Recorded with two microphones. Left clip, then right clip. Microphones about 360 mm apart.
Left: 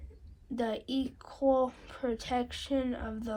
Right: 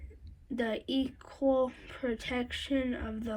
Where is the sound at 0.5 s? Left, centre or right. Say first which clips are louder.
Right 1 dB; centre.